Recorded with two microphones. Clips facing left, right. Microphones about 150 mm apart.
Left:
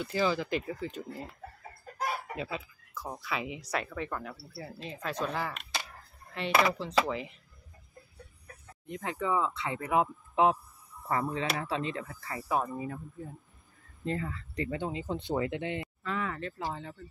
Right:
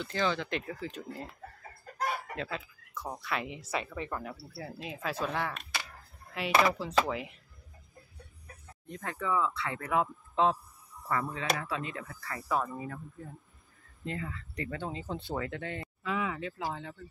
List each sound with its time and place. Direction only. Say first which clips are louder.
0.0 s speech: left 2 dB; 5° left (ahead or behind)
8.8 s speech: left 2 dB; 15° left (ahead or behind)
11.1 s speech: left 1 dB; 25° left (ahead or behind)
14.0 s speech: left 4 dB; 35° left (ahead or behind)
14.7 s speech: left 2 dB; 15° left (ahead or behind)
16.0 s speech: right 6 dB; 5° right (ahead or behind)